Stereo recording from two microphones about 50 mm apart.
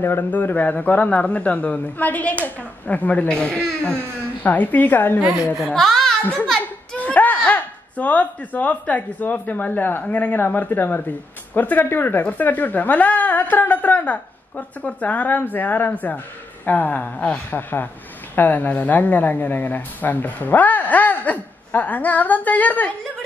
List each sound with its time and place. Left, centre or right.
0.0 s speech: left
0.3 s speech: left
5.8 s a sound: centre
7.0 s speech: left
17.5 s speech: left